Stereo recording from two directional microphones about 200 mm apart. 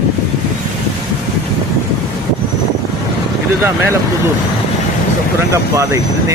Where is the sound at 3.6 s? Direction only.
15° right (ahead or behind).